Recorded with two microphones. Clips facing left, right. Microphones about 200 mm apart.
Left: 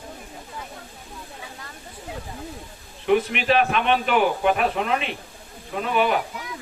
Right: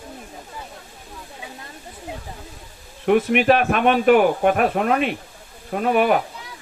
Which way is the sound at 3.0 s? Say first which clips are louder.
Right 4 dB; 50° right (ahead or behind).